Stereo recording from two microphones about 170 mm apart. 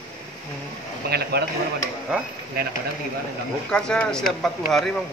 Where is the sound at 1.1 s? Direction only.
70° right (ahead or behind).